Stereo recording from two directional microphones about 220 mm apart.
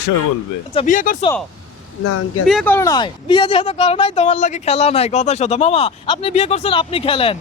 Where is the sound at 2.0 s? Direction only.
90° left.